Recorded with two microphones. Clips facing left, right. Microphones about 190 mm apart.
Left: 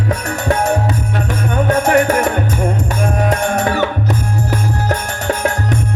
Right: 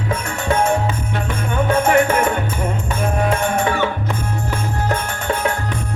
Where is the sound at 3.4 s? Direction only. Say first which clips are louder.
Left 2 dB; 70° left (ahead or behind).